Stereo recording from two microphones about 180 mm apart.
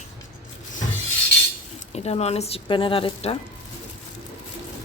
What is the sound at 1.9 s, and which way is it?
Speech, 35° left (ahead or behind).